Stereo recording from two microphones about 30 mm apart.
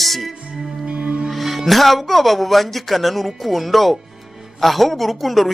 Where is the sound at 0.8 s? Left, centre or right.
Right.